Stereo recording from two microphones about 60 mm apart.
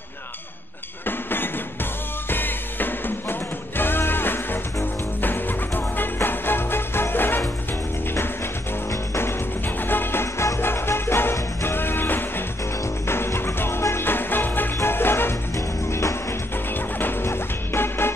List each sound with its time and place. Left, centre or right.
1.0 s music: left
8.9 s music: left
9.8 s music: left
15.5 s music: left
16.7 s music: left